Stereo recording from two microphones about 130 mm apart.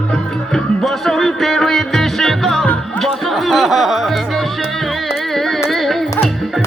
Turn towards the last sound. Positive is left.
turn(degrees=0)  # may be behind; listen again after turning